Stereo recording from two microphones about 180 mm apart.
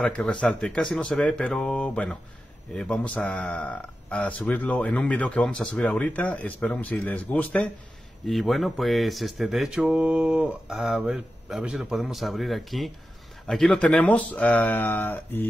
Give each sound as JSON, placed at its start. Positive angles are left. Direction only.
{"t": 0.0, "sound": "speech", "side_deg": 5}